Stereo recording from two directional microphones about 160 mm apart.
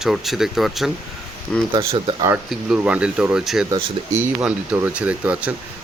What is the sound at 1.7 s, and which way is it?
Speech, 35° right (ahead or behind).